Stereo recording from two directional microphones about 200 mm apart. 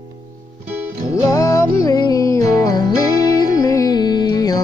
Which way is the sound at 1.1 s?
15° left (ahead or behind).